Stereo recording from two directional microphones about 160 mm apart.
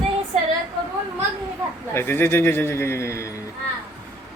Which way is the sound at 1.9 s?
15° left (ahead or behind).